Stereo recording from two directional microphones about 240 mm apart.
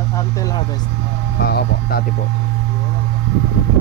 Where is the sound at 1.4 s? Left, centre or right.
Left.